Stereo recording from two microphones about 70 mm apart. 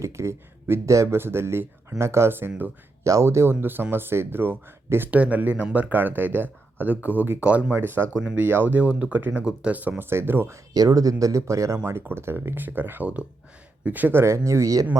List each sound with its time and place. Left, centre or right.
0.0 s speech: right
3.0 s speech: right
5.1 s speech: right
10.0 s speech: right
10.8 s speech: right
11.9 s speech: right
14.2 s speech: right